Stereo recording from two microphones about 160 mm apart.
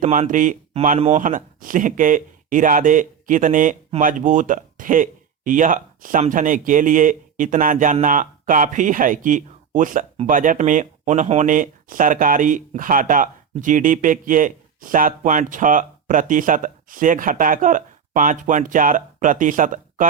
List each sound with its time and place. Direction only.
0.0 s speech: 50° right (ahead or behind)
0.9 s speech: 40° right (ahead or behind)
1.2 s speech: 55° right (ahead or behind)